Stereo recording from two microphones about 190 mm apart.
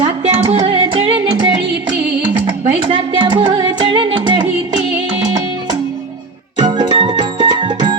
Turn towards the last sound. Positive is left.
turn(degrees=-25)  # may be behind; listen again after turning